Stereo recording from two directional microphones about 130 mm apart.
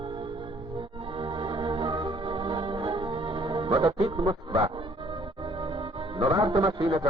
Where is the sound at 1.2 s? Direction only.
40° right (ahead or behind).